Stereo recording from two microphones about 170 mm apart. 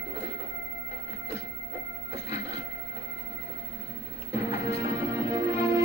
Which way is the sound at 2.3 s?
40° left (ahead or behind).